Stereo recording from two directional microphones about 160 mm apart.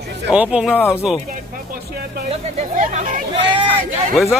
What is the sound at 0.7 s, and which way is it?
Speech, 15° left (ahead or behind).